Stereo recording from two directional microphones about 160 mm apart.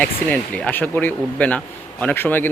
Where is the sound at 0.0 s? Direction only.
10° left (ahead or behind).